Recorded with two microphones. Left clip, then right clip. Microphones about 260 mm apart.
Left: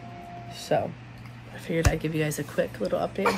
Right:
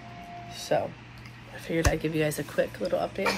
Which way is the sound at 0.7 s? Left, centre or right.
Centre.